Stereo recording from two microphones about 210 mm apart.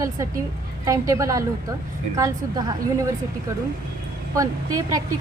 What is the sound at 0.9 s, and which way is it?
A woman's voice, 15° right (ahead or behind).